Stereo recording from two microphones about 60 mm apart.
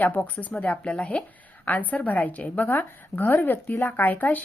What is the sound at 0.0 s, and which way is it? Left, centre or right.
A woman's voice, left.